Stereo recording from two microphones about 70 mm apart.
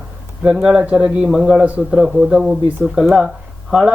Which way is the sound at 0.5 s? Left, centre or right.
Centre.